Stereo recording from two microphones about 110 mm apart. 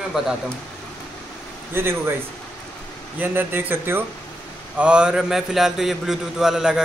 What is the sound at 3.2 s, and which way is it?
Speech, 20° right (ahead or behind).